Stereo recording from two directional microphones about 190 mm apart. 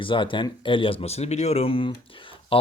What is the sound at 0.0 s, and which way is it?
Speech, 25° left (ahead or behind).